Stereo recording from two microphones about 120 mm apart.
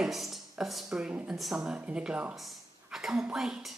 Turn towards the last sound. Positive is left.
turn(degrees=-5)  # may be behind; listen again after turning